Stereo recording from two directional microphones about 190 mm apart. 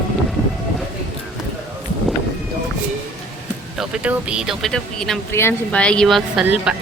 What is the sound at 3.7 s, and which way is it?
Speech, 5° right (ahead or behind).